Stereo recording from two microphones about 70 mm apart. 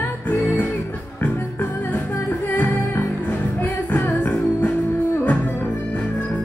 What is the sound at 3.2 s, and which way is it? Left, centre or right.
Music, left.